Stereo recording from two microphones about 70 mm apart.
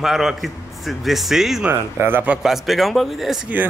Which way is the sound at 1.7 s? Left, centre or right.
Right.